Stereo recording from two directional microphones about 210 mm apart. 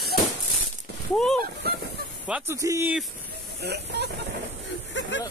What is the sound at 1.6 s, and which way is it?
Fowl, 50° right (ahead or behind).